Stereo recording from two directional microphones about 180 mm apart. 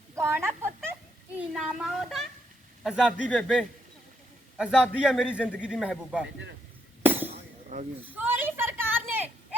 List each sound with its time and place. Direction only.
0.2 s speech: 15° right (ahead or behind)
1.4 s a man's voice: 5° right (ahead or behind)
8.1 s a sound: 10° right (ahead or behind)